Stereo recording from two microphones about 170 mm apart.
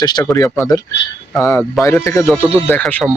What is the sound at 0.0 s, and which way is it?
Speech, 25° left (ahead or behind).